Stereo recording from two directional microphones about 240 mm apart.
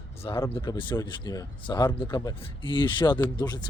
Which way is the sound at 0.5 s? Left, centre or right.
Left.